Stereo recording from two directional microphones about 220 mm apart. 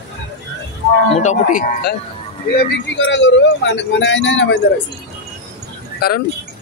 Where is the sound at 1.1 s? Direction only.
30° left (ahead or behind).